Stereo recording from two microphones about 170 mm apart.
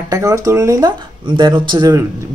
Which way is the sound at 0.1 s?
20° right (ahead or behind).